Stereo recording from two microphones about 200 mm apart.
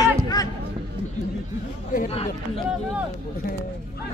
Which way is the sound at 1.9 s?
30° left (ahead or behind).